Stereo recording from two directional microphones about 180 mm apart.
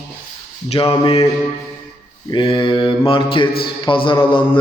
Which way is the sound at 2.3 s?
25° left (ahead or behind).